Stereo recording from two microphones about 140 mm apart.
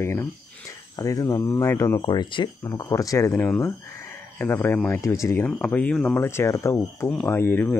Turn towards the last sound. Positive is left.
turn(degrees=15)  # may be behind; listen again after turning